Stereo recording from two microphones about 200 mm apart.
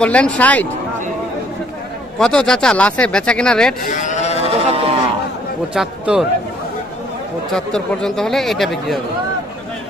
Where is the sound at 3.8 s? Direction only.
40° left (ahead or behind).